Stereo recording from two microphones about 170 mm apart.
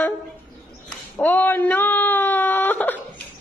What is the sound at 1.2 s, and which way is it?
Whimper, 10° left (ahead or behind).